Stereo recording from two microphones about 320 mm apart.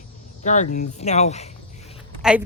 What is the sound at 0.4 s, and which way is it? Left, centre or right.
Speech, left.